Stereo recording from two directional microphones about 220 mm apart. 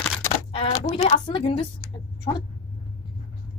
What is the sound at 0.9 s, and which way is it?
Speech, 30° left (ahead or behind).